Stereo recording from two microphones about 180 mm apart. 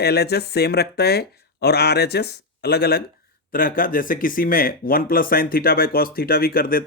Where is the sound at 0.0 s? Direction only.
65° left (ahead or behind).